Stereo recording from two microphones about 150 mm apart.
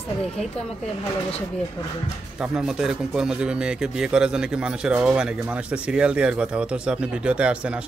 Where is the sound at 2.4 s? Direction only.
5° right (ahead or behind).